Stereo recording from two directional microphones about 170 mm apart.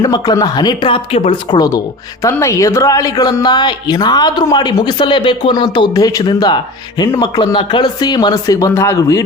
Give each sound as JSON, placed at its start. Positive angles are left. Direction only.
{"t": 0.0, "sound": "a woman's voice", "side_deg": 20}